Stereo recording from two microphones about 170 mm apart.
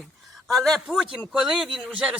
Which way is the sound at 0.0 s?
Centre (ahead or behind).